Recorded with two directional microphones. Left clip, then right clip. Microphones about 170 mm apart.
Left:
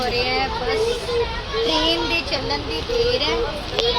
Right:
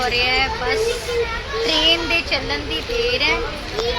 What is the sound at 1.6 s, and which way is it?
Speech, 20° left (ahead or behind).